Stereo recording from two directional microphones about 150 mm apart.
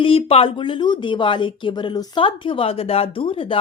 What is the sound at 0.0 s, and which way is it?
Speech, 40° left (ahead or behind).